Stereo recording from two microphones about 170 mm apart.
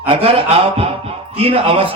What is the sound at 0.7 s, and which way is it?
A man's voice, 35° right (ahead or behind).